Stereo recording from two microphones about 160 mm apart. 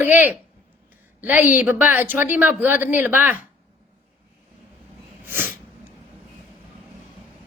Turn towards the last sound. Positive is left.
turn(degrees=-15)  # may be behind; listen again after turning